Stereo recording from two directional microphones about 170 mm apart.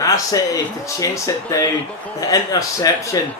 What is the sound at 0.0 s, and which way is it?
Speech, 20° left (ahead or behind).